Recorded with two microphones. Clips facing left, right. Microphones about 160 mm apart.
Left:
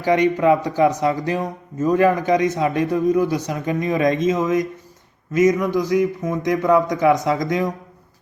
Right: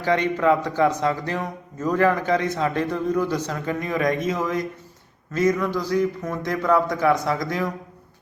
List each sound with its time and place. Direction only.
0.0 s a man's voice: 15° left (ahead or behind)